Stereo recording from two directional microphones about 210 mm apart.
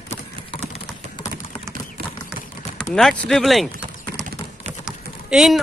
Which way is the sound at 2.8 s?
5° left (ahead or behind).